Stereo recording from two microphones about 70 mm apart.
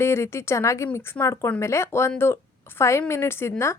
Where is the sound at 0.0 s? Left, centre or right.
Left.